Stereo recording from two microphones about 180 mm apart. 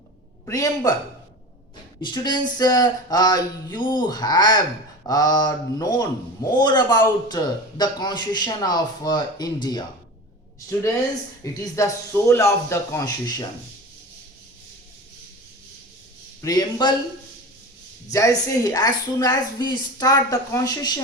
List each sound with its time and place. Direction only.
0.4 s a man's voice: 20° left (ahead or behind)
2.0 s a man's voice: 25° left (ahead or behind)
11.4 s speech: 20° left (ahead or behind)
16.4 s a man's voice: 20° left (ahead or behind)
18.1 s a man's voice: 20° left (ahead or behind)